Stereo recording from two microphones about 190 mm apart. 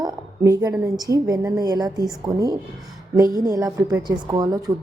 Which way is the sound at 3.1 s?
20° right (ahead or behind).